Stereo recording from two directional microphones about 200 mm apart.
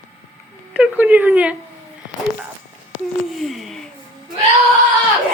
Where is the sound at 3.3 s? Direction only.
Centre (ahead or behind).